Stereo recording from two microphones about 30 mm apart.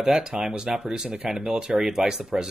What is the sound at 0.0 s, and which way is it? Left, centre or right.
Speech, right.